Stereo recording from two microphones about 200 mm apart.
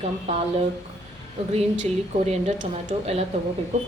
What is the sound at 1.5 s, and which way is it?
Speech, 35° right (ahead or behind).